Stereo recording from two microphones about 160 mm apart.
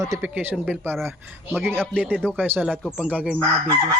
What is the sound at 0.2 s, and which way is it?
Speech, 10° right (ahead or behind).